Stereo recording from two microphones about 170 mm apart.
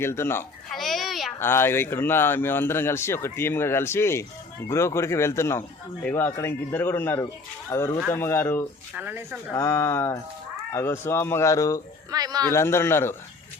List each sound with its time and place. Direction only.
0.0 s a man's voice: 15° left (ahead or behind)
0.7 s a sound: centre (ahead or behind)
1.4 s a man's voice: 15° left (ahead or behind)
9.0 s speech: 10° right (ahead or behind)
9.5 s a man's voice: 20° left (ahead or behind)
12.1 s a sound: 20° right (ahead or behind)
12.5 s a man's voice: 15° left (ahead or behind)